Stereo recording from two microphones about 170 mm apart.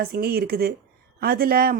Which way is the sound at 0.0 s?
60° right (ahead or behind).